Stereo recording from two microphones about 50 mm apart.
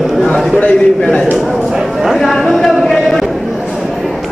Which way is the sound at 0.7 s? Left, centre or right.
Centre.